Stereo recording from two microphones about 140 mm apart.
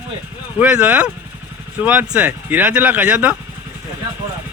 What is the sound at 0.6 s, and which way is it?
Speech, 10° right (ahead or behind).